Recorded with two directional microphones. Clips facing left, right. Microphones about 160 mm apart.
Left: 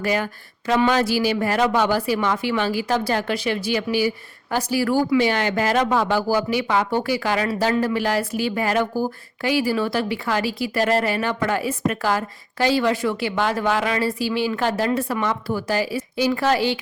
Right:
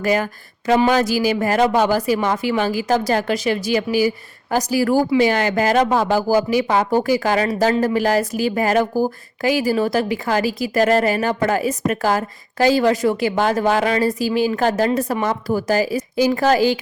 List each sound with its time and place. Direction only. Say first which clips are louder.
0.0 s a woman's voice: right 4 dB; 45° right (ahead or behind)